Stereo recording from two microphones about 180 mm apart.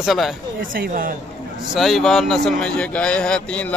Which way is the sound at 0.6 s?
50° right (ahead or behind).